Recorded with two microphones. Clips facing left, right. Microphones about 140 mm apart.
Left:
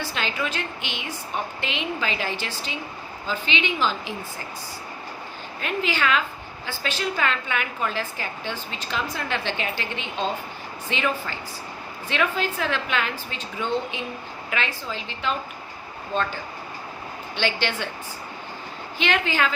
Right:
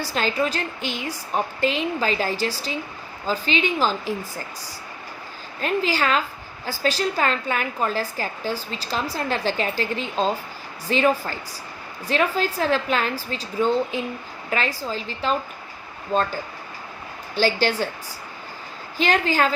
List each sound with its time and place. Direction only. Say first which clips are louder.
0.0 s a woman's voice: right 5 dB; 40° right (ahead or behind)
5.5 s a woman's voice: right 4 dB; 35° right (ahead or behind)
17.3 s a woman's voice: right 5 dB; 40° right (ahead or behind)
18.9 s a woman's voice: right 3 dB; 40° right (ahead or behind)